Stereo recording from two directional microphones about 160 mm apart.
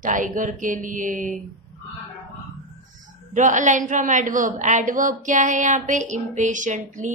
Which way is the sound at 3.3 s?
50° right (ahead or behind).